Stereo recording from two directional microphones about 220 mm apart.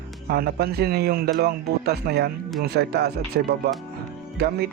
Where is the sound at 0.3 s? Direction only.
45° right (ahead or behind).